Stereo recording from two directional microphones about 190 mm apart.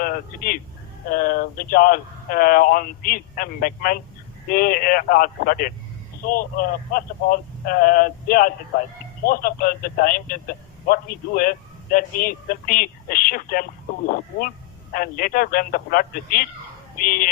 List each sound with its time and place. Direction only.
0.0 s speech: 50° left (ahead or behind)
14.9 s speech: 50° left (ahead or behind)